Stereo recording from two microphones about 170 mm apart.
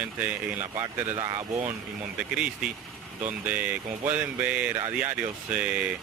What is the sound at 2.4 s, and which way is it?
Speech, 5° right (ahead or behind).